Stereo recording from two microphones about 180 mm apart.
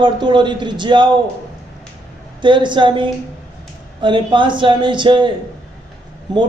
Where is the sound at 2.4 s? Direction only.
25° right (ahead or behind).